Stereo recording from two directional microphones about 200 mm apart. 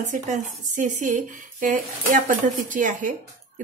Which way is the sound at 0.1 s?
40° right (ahead or behind).